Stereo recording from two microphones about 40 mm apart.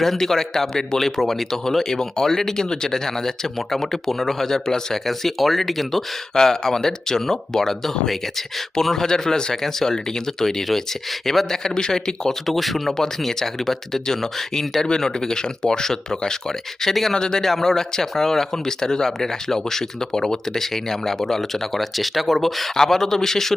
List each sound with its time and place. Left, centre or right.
0.0 s speech: centre
5.0 s speech: centre
12.5 s speech: centre
17.2 s speech: centre